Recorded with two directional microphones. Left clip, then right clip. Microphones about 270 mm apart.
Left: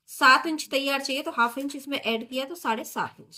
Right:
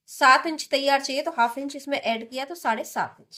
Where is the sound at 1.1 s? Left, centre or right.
Right.